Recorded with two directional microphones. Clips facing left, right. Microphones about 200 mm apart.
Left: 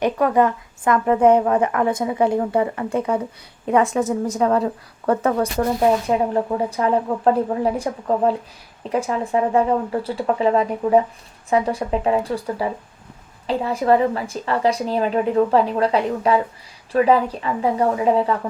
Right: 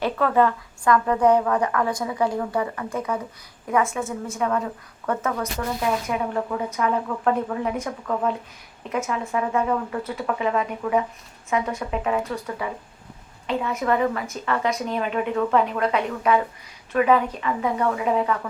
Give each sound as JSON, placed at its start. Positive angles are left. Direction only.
{"t": 0.0, "sound": "a woman's voice", "side_deg": 15}